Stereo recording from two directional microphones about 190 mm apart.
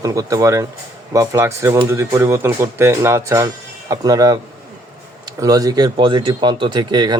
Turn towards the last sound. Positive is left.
turn(degrees=-20)  # may be behind; listen again after turning